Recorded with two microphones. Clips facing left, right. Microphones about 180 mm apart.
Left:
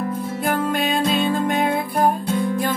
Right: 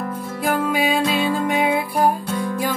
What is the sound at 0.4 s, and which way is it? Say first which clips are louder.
Music: right 2 dB; 5° right (ahead or behind).